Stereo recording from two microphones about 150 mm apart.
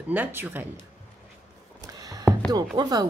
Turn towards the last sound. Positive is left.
turn(degrees=-25)  # may be behind; listen again after turning